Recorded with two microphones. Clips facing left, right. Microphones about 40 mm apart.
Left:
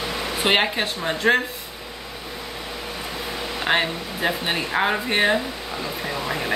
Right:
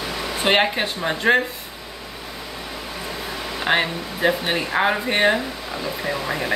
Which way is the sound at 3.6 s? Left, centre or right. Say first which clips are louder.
Right 1 dB; centre.